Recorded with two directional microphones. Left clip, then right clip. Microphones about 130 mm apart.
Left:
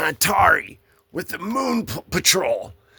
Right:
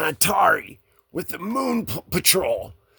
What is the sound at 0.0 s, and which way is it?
Speech, 60° right (ahead or behind).